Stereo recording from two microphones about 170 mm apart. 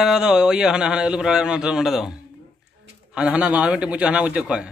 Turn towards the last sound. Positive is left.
turn(degrees=-5)  # may be behind; listen again after turning